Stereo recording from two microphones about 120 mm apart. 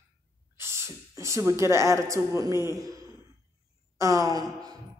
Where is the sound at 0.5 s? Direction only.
20° right (ahead or behind).